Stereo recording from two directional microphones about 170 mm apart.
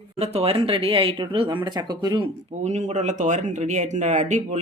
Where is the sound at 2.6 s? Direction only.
45° right (ahead or behind).